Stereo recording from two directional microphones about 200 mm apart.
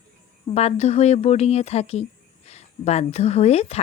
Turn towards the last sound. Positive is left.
turn(degrees=30)  # may be behind; listen again after turning